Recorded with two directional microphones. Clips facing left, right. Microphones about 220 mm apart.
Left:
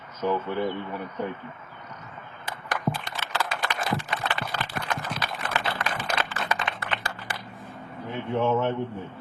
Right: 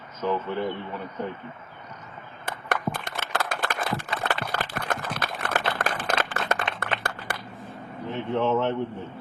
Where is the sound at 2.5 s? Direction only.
55° right (ahead or behind).